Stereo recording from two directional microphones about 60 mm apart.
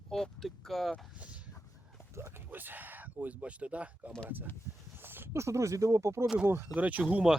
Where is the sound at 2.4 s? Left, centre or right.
Right.